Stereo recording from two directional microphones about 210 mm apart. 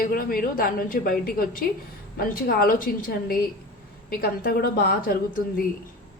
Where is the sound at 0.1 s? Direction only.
45° left (ahead or behind).